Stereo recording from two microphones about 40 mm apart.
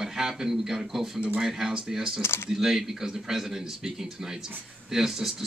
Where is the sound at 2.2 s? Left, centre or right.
Left.